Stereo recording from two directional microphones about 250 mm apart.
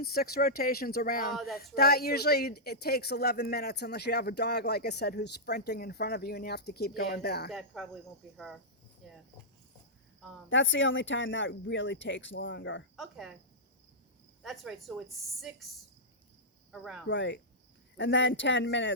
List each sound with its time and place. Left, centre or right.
0.0 s speech: left
1.3 s speech: centre
1.5 s speech: left
7.5 s speech: centre
9.0 s cricket: centre
10.5 s speech: left
13.0 s speech: centre
14.4 s speech: centre
17.1 s speech: left